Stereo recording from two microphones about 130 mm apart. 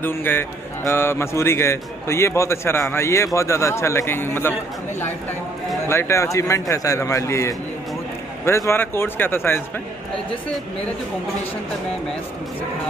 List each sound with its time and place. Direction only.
0.0 s a man's voice: 15° left (ahead or behind)
5.9 s a man's voice: 20° left (ahead or behind)